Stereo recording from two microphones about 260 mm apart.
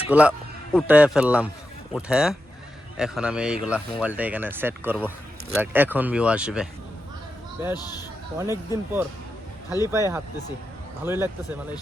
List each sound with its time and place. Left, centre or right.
0.1 s a man's voice: centre
7.7 s speech: centre
8.4 s speech: centre